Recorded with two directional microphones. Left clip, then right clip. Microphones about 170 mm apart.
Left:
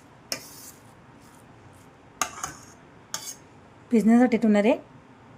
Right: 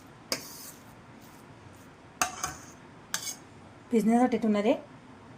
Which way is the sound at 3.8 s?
35° left (ahead or behind).